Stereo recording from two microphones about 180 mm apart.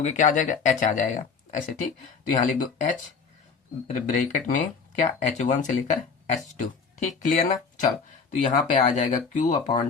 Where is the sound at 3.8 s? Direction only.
45° left (ahead or behind).